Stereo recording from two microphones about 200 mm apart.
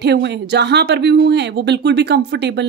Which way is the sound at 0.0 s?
55° right (ahead or behind).